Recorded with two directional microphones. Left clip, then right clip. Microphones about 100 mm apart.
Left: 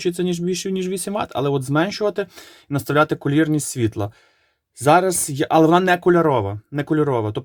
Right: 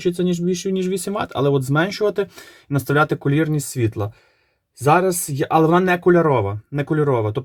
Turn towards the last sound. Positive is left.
turn(degrees=35)  # may be behind; listen again after turning